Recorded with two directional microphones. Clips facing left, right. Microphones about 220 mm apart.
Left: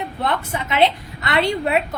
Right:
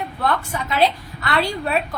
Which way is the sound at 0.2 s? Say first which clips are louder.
Right 1 dB; 20° left (ahead or behind).